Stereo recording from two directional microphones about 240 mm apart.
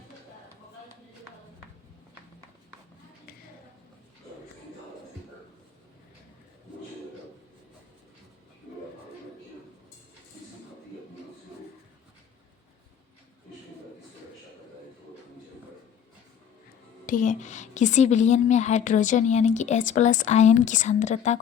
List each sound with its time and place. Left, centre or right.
17.1 s a woman's voice: left